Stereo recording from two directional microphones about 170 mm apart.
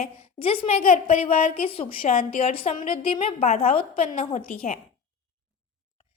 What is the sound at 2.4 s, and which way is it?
A woman's voice, 35° left (ahead or behind).